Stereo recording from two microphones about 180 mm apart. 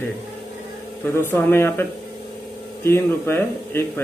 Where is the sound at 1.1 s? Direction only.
10° left (ahead or behind).